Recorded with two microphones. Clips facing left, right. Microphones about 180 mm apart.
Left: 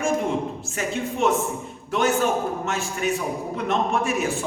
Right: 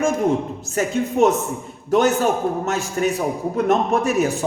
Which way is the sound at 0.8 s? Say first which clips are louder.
Right 7 dB; 40° right (ahead or behind).